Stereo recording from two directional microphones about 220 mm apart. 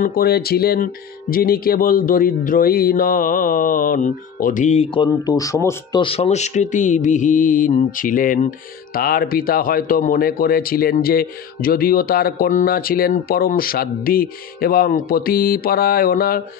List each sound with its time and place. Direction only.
0.0 s speech: 45° left (ahead or behind)
1.3 s mantra: 40° left (ahead or behind); by 6.0 s 15° left (ahead or behind)
6.0 s mantra: 30° left (ahead or behind)